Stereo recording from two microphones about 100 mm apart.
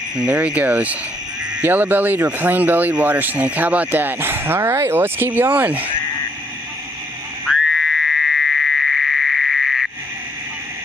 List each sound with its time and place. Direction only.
0.3 s speech: 10° right (ahead or behind)
7.4 s frog: centre (ahead or behind)